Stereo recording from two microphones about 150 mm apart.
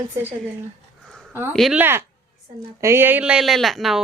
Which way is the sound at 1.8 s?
15° right (ahead or behind).